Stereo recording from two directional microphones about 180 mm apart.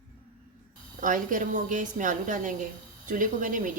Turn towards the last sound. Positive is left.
turn(degrees=-45)  # may be behind; listen again after turning